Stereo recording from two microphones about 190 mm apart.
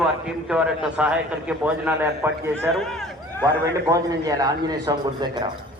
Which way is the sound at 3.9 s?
20° right (ahead or behind).